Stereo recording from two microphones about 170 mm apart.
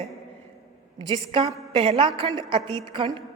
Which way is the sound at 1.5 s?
30° right (ahead or behind).